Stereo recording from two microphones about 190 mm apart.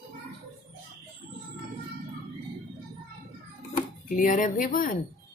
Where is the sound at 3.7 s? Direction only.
45° left (ahead or behind).